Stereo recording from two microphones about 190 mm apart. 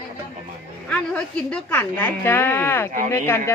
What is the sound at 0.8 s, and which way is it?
A woman's voice, 5° left (ahead or behind).